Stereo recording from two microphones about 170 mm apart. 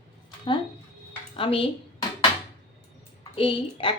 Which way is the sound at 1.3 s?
30° left (ahead or behind).